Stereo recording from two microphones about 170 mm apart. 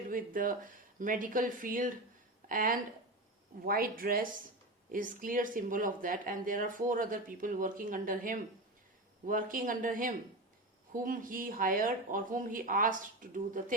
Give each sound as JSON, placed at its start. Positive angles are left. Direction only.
{"t": 0.1, "sound": "speech", "side_deg": -55}